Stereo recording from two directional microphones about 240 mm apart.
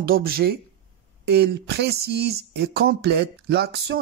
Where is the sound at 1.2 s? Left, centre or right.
Right.